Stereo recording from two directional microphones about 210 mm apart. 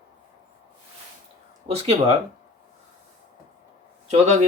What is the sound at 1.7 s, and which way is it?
Speech, 30° right (ahead or behind).